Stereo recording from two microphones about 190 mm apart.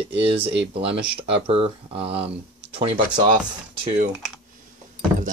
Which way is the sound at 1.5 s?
30° right (ahead or behind).